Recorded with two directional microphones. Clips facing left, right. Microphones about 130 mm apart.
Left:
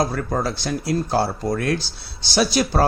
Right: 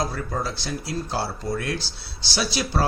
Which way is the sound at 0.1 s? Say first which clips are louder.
Left 5 dB; 55° left (ahead or behind).